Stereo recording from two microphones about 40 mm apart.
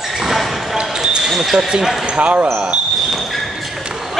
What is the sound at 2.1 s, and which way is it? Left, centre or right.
Speech, right.